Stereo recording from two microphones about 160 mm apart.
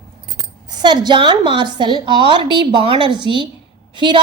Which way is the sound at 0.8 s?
30° right (ahead or behind).